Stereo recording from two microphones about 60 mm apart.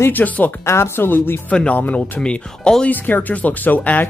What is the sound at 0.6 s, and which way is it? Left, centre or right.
Speech, left.